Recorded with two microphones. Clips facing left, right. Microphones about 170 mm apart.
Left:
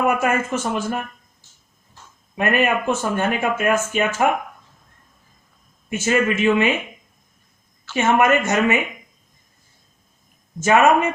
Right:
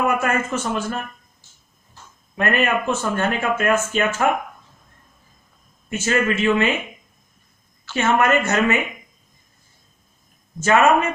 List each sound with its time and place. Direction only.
0.2 s speech: 15° left (ahead or behind)
2.3 s speech: 10° left (ahead or behind)
6.1 s speech: 15° left (ahead or behind)
7.9 s speech: 15° left (ahead or behind)
10.6 s speech: 15° left (ahead or behind)